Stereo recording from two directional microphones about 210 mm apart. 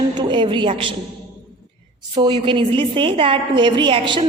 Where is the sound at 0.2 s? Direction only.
20° right (ahead or behind).